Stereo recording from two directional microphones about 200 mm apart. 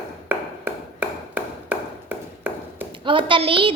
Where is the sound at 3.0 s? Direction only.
25° right (ahead or behind).